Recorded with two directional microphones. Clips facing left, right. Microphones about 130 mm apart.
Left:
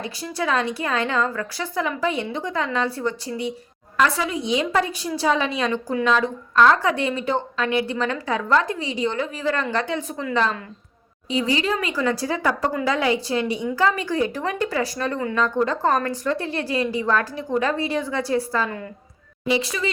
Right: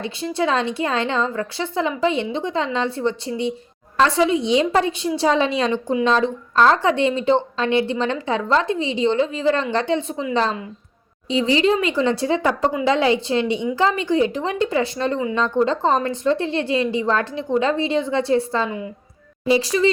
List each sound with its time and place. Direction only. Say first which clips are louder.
0.0 s a woman's voice: right 4 dB; 25° right (ahead or behind)